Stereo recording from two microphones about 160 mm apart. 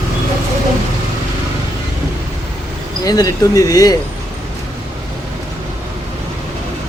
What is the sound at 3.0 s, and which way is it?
Speech, 25° left (ahead or behind).